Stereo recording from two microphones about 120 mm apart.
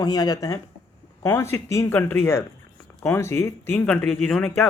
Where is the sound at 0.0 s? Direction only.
30° left (ahead or behind).